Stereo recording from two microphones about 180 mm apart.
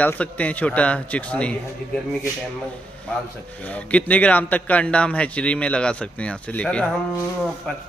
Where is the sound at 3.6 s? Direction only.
5° left (ahead or behind).